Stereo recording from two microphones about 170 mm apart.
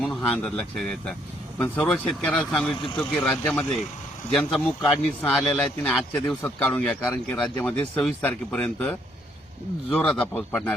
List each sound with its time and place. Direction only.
0.0 s a man's voice: 5° left (ahead or behind)